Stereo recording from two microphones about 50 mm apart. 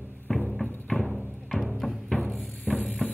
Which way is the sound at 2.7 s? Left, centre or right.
Left.